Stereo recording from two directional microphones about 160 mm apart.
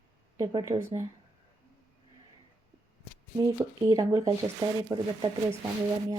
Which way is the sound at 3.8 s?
25° right (ahead or behind).